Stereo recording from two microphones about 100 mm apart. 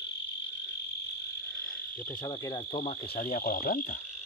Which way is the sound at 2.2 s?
40° left (ahead or behind).